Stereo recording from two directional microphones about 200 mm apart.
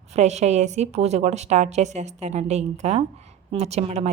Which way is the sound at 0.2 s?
35° right (ahead or behind).